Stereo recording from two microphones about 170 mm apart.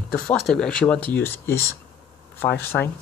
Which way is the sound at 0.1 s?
5° left (ahead or behind).